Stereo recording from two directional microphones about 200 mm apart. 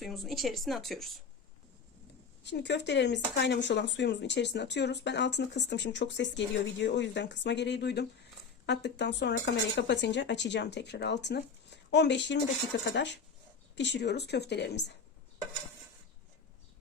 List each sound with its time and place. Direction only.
0.0 s speech: centre (ahead or behind)
2.4 s speech: 60° left (ahead or behind)